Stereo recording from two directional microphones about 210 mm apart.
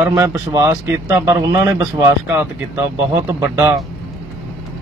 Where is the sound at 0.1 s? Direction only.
15° right (ahead or behind).